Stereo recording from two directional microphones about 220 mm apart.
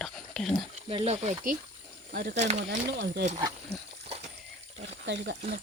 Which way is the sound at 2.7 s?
50° right (ahead or behind).